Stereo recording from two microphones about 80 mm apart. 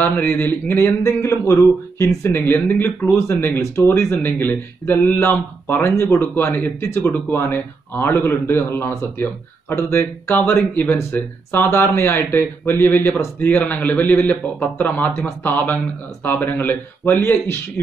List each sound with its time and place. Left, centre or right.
0.0 s speech: left
1.0 s a man's voice: left